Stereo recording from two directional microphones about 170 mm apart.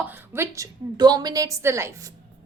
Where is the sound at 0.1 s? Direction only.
15° right (ahead or behind).